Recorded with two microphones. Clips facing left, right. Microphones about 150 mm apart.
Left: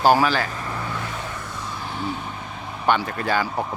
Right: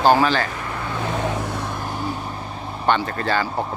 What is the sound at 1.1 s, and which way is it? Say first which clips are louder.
Vehicle: right 8 dB; 75° right (ahead or behind).